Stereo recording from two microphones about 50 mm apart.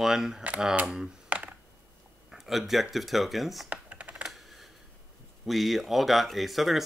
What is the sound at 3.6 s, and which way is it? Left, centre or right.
Computer keyboard, right.